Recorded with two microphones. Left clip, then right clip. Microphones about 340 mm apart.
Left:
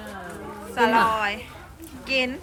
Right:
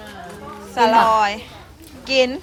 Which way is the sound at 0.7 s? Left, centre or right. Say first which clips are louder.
Right 6 dB; centre.